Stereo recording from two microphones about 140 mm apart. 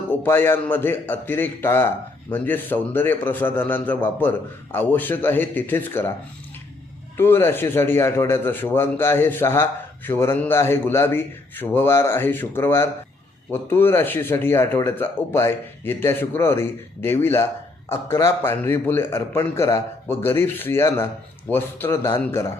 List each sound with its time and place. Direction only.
0.1 s speech: 15° left (ahead or behind)
7.2 s speech: 15° left (ahead or behind)